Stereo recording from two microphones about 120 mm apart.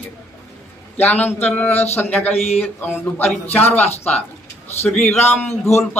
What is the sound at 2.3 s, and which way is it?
Speech, 60° left (ahead or behind).